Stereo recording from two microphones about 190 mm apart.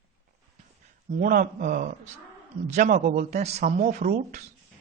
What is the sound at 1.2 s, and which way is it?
Speech, 45° right (ahead or behind).